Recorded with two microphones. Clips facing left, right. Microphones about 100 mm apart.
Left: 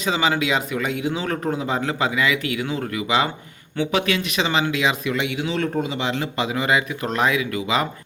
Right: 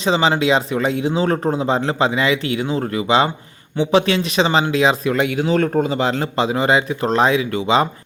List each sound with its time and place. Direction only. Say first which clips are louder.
0.0 s speech: right 5 dB; 30° right (ahead or behind)